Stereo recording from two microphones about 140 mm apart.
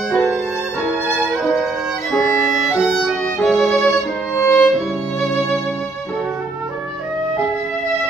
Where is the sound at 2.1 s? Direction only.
Centre (ahead or behind).